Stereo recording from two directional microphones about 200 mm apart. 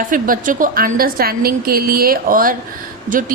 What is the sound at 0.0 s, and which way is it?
Speech, 40° right (ahead or behind).